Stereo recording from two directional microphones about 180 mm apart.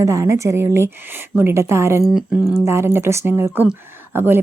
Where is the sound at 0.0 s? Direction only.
15° right (ahead or behind).